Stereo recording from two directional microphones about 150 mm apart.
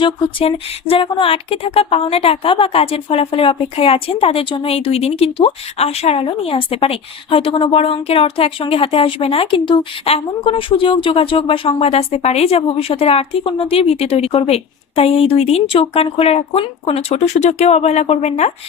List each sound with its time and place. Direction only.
0.0 s speech: 35° left (ahead or behind)